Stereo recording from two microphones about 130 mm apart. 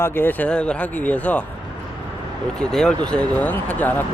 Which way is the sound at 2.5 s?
5° left (ahead or behind).